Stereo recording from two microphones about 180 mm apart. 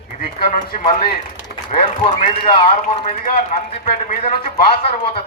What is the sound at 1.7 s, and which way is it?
A man's voice, 30° left (ahead or behind).